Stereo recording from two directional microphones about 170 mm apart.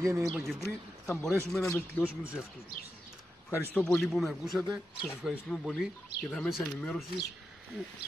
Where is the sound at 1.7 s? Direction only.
15° left (ahead or behind).